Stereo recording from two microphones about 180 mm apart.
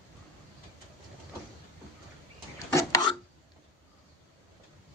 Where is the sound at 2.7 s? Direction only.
20° left (ahead or behind).